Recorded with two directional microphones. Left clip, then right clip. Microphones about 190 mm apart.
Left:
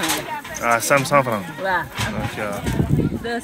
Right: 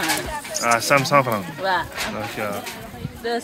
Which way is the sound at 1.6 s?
20° left (ahead or behind).